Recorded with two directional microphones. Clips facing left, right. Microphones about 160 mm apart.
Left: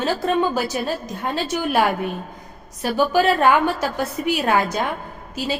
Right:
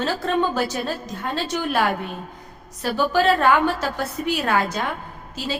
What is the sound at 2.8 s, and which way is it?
A woman's voice, 15° left (ahead or behind).